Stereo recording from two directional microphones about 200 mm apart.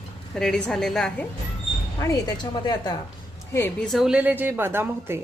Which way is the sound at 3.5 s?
5° left (ahead or behind).